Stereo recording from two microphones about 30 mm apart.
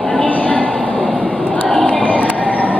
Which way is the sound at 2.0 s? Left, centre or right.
Left.